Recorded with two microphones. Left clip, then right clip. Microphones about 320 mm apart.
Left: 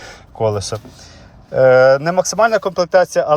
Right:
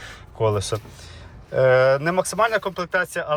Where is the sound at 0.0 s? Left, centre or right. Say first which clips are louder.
Left 4 dB; centre.